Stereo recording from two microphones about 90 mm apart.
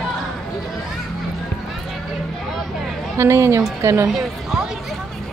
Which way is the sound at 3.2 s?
35° right (ahead or behind).